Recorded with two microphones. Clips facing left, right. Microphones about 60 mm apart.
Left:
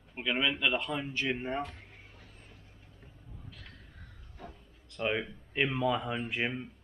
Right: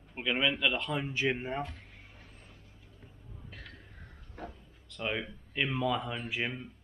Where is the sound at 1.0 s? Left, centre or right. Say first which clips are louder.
Right 2 dB; centre.